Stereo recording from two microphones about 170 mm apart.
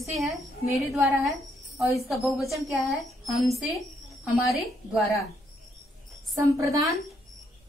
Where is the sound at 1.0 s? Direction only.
15° right (ahead or behind).